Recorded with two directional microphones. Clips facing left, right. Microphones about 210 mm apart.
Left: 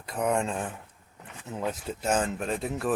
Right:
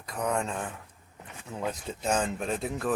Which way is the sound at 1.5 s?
5° left (ahead or behind).